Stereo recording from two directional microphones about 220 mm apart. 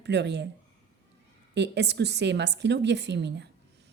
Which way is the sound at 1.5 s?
50° right (ahead or behind).